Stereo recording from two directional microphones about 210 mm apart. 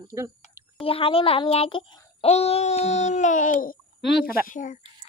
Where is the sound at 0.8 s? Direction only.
25° left (ahead or behind).